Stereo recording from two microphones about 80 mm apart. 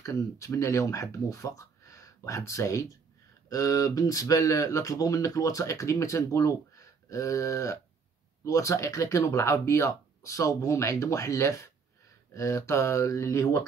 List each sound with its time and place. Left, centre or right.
0.0 s speech: left